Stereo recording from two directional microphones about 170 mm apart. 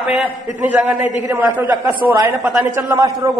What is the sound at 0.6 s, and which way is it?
A man's voice, 10° right (ahead or behind).